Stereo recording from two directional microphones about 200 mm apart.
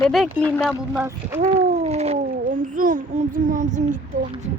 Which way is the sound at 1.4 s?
35° right (ahead or behind).